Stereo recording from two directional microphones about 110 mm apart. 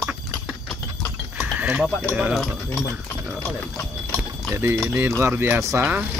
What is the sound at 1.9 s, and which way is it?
Speech, 15° left (ahead or behind).